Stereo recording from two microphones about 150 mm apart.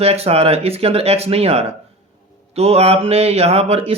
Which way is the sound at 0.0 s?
40° right (ahead or behind).